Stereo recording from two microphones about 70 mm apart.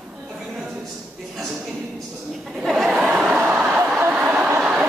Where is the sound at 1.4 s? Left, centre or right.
Centre.